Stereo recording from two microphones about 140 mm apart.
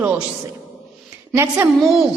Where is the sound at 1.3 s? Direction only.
15° right (ahead or behind).